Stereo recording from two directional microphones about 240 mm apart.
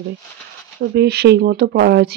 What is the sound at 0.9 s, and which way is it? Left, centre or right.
Speech, right.